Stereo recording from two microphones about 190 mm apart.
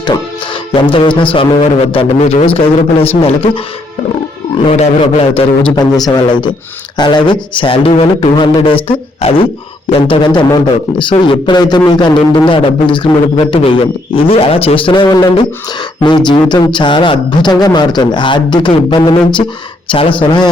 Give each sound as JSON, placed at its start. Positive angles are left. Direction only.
{"t": 0.7, "sound": "speech", "side_deg": 25}
{"t": 4.6, "sound": "speech", "side_deg": 30}